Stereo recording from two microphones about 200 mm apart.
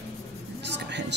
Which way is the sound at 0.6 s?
60° right (ahead or behind).